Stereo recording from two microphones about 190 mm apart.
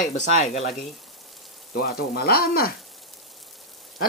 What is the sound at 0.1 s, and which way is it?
Speech, 40° left (ahead or behind).